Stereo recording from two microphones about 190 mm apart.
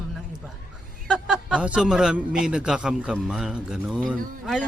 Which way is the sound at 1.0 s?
5° right (ahead or behind).